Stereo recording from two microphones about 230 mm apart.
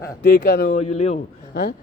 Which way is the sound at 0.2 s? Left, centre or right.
Left.